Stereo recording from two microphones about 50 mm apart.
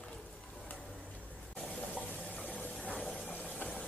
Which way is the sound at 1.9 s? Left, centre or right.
Left.